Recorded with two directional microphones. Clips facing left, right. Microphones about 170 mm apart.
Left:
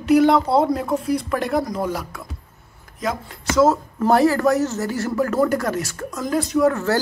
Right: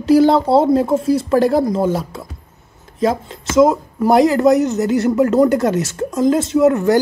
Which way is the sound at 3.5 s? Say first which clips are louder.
Right 4 dB; 15° right (ahead or behind).